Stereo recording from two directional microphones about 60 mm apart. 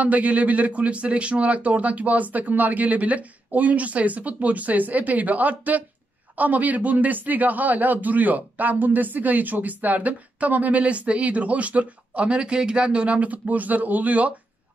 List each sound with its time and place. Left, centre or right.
0.0 s speech: right